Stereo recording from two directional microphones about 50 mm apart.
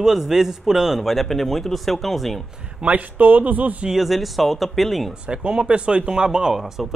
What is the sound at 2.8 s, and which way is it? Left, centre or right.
Speech, right.